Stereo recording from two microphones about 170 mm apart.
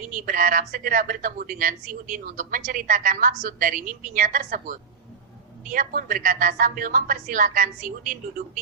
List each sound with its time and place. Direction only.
0.1 s a woman's voice: 55° right (ahead or behind)